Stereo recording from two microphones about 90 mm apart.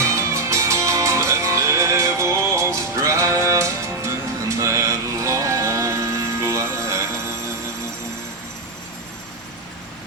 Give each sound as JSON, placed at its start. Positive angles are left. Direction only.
{"t": 0.0, "sound": "music", "side_deg": -35}